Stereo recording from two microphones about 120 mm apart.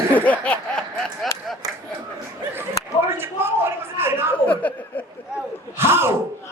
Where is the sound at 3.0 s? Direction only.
20° right (ahead or behind).